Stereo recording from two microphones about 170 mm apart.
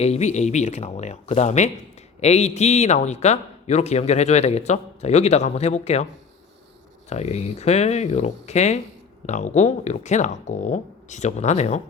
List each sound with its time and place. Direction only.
0.0 s a man's voice: 40° left (ahead or behind)
7.1 s a man's voice: 40° left (ahead or behind)